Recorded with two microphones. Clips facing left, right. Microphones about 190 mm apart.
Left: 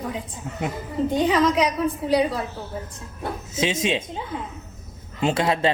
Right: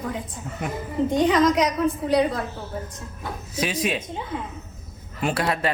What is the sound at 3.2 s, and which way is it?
Speech, 25° left (ahead or behind).